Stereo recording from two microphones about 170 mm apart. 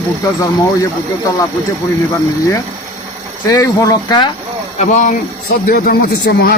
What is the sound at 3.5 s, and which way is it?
Speech, 20° left (ahead or behind).